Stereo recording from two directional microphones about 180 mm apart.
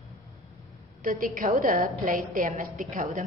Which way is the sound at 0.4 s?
Centre (ahead or behind).